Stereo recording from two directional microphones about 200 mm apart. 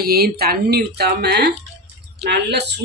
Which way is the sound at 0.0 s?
50° right (ahead or behind).